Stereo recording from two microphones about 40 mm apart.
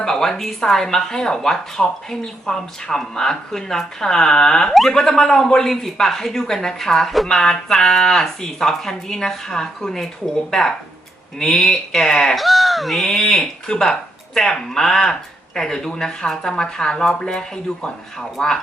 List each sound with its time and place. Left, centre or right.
0.0 s speech: centre
12.4 s speech: centre